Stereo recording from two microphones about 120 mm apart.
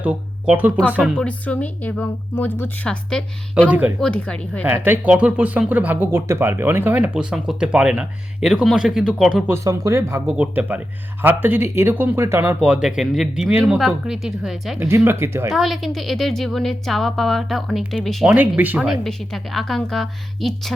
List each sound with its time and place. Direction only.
0.0 s speech: 15° right (ahead or behind)
1.1 s speech: 10° left (ahead or behind)
3.7 s speech: 10° right (ahead or behind)
4.0 s speech: 10° left (ahead or behind)
4.6 s speech: 15° right (ahead or behind)
9.5 s speech: 25° right (ahead or behind)
10.3 s speech: 10° right (ahead or behind)
12.6 s a woman's voice: 5° right (ahead or behind)
14.8 s speech: 20° right (ahead or behind)
15.5 s a woman's voice: centre (ahead or behind)
18.3 s speech: 15° right (ahead or behind)
18.9 s a woman's voice: centre (ahead or behind)